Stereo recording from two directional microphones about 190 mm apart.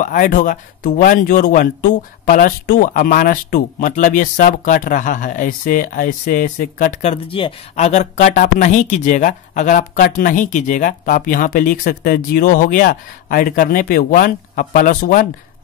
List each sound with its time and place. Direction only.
0.0 s speech: 45° left (ahead or behind)